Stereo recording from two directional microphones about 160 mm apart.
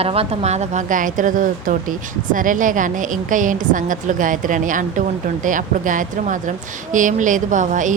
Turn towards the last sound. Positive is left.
turn(degrees=-50)  # may be behind; listen again after turning